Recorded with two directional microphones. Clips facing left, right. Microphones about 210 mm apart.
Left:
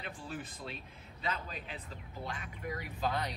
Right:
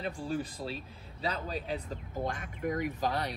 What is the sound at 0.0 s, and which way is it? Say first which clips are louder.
Speech: right 9 dB; 35° right (ahead or behind).